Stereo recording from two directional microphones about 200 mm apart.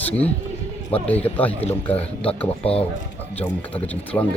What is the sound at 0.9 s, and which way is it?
Speech, 5° left (ahead or behind).